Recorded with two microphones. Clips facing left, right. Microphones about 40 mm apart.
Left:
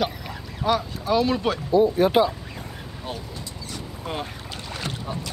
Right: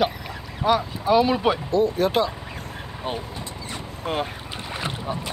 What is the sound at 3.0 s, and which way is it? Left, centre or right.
Vehicle, right.